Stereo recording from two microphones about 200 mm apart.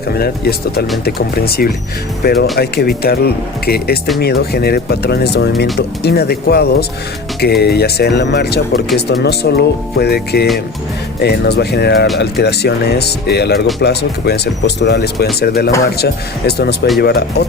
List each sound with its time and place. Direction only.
0.1 s speech: 50° left (ahead or behind)